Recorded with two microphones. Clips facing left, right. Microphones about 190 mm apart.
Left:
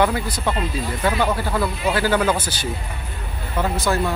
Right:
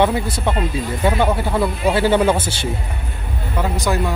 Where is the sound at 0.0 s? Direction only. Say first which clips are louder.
Right 3 dB; 25° right (ahead or behind).